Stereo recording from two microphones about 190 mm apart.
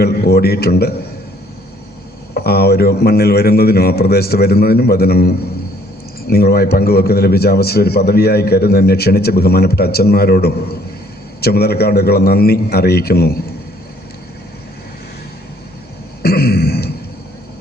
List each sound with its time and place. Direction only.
0.0 s a man's voice: 55° left (ahead or behind)
2.3 s a man's voice: 55° left (ahead or behind)
16.2 s throat clearing: 55° left (ahead or behind)